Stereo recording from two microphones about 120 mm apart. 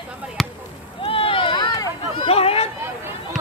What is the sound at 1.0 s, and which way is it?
Run, 50° left (ahead or behind).